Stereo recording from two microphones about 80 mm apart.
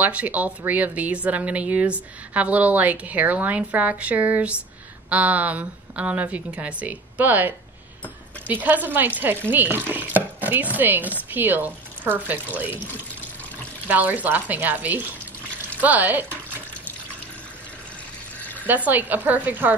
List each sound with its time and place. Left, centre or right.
0.0 s a woman's voice: centre
13.8 s a woman's voice: centre
18.4 s a sound: left
18.9 s a woman's voice: right